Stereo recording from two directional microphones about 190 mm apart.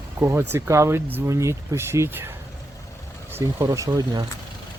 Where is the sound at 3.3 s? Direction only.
15° right (ahead or behind).